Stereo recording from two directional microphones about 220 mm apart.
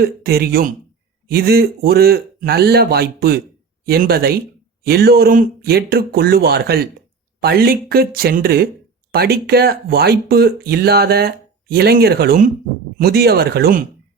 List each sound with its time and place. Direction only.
0.0 s speech: 45° right (ahead or behind)